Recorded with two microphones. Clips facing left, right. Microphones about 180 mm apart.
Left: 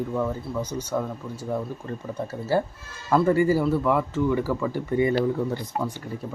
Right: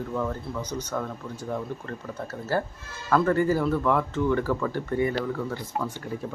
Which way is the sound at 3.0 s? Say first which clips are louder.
Left 2 dB; 10° left (ahead or behind).